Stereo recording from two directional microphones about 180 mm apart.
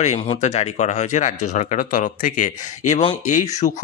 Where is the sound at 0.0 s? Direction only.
35° left (ahead or behind).